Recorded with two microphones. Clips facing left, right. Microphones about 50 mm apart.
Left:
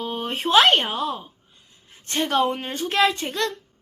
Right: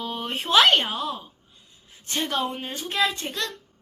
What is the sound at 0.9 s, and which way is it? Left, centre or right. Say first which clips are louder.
A woman's voice: left 3 dB; left.